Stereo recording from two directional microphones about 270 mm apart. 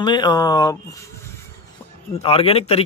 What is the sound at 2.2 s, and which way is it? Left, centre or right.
Speech, left.